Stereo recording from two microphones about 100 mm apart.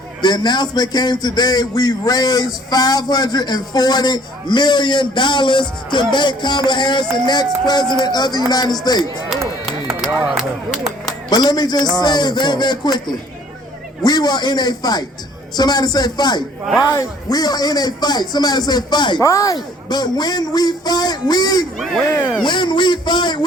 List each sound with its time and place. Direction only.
0.2 s a man's voice: 45° left (ahead or behind)
11.3 s a man's voice: 40° left (ahead or behind)
19.2 s a man's voice: 35° left (ahead or behind)
19.5 s a man's voice: 45° left (ahead or behind)